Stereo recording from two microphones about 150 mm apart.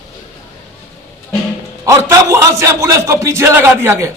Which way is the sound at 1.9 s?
20° right (ahead or behind).